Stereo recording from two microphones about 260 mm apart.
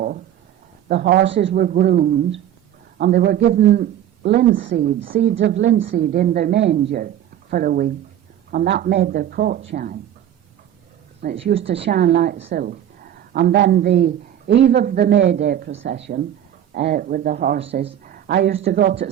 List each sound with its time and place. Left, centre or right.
0.9 s a woman's voice: right
5.3 s a woman's voice: right
6.1 s a woman's voice: right
11.2 s a woman's voice: right